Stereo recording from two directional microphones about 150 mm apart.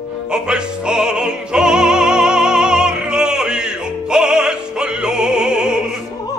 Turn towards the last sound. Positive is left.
turn(degrees=-5)  # may be behind; listen again after turning